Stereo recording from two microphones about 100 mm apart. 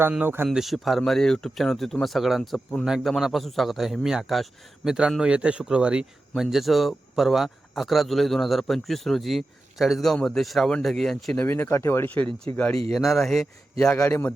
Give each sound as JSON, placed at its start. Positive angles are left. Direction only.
{"t": 0.1, "sound": "speech", "side_deg": -20}
{"t": 0.4, "sound": "a man's voice", "side_deg": 0}
{"t": 11.4, "sound": "speech", "side_deg": 20}
{"t": 12.9, "sound": "a man's voice", "side_deg": 0}
{"t": 13.9, "sound": "speech", "side_deg": 25}